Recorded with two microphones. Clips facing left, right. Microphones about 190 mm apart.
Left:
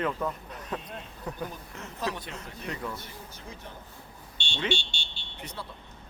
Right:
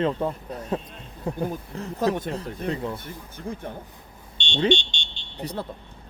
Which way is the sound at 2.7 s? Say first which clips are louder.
Right 7 dB; 30° right (ahead or behind).